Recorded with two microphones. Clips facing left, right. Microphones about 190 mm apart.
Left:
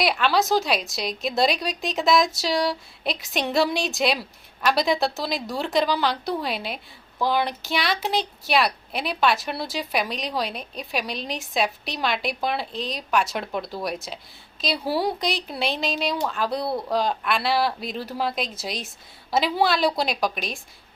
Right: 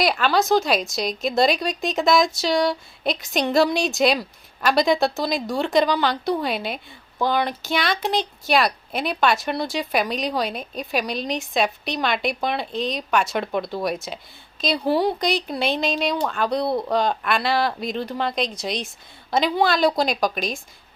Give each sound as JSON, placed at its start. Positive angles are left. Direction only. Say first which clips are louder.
{"t": 0.0, "sound": "speech", "louder": "right 2 dB", "side_deg": 0}